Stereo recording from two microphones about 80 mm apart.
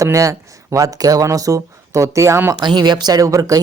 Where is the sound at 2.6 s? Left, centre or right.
Right.